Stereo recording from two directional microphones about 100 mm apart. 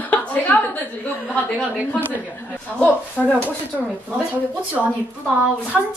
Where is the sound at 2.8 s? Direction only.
15° left (ahead or behind).